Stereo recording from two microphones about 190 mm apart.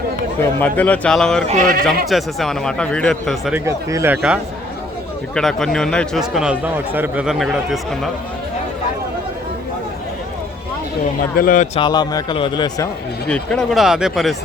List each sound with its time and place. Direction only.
0.6 s a man's voice: 10° left (ahead or behind)
1.5 s speech: 45° right (ahead or behind)
2.0 s a man's voice: centre (ahead or behind)
3.7 s a man's voice: 15° right (ahead or behind); by 8.1 s centre (ahead or behind)
11.3 s a man's voice: 45° left (ahead or behind)
11.8 s a man's voice: 20° left (ahead or behind)
13.2 s a man's voice: 5° left (ahead or behind)